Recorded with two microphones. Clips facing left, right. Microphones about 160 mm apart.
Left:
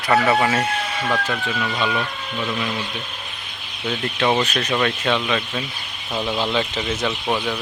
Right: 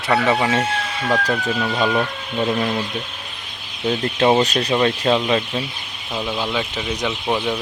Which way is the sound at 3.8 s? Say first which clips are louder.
Right 4 dB; 30° right (ahead or behind).